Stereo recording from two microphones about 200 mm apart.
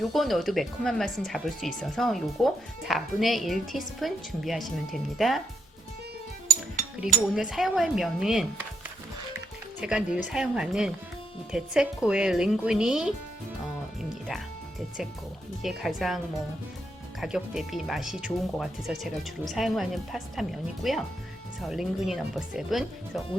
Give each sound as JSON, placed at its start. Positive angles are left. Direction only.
{"t": 0.0, "sound": "speech", "side_deg": 0}
{"t": 7.1, "sound": "speech", "side_deg": 0}
{"t": 9.8, "sound": "speech", "side_deg": -5}
{"t": 15.6, "sound": "speech", "side_deg": 0}